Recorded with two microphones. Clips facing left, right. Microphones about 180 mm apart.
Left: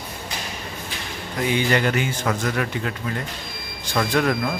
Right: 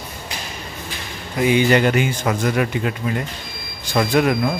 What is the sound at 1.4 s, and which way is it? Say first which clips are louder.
Speech: right 6 dB; 15° right (ahead or behind).